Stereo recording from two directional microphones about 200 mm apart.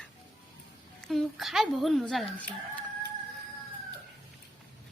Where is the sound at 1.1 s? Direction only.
Centre (ahead or behind).